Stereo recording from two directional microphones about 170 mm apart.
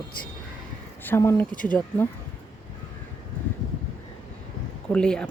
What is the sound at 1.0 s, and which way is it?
Speech, 15° left (ahead or behind).